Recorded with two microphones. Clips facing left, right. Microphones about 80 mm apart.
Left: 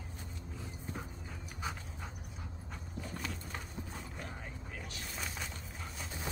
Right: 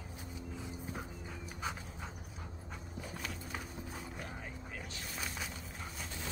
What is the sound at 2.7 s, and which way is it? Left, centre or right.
Clip-clop, centre.